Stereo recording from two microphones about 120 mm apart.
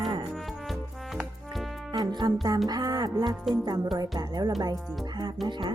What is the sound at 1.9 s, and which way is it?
Music, 35° right (ahead or behind).